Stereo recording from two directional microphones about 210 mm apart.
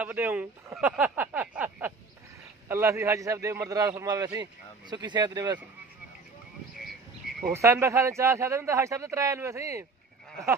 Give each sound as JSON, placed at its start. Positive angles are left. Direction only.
{"t": 0.0, "sound": "a man's voice", "side_deg": -10}
{"t": 7.3, "sound": "a man's voice", "side_deg": -10}